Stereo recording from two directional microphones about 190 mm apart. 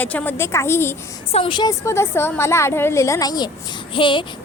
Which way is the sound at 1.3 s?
25° left (ahead or behind).